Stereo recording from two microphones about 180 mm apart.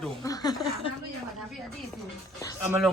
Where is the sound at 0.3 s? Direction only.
25° left (ahead or behind).